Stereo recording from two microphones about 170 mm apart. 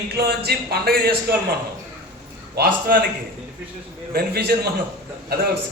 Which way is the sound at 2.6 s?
60° right (ahead or behind).